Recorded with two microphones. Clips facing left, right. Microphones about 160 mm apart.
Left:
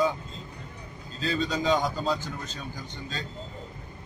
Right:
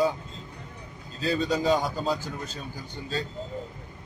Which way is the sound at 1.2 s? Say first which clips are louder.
Right 2 dB; 5° right (ahead or behind).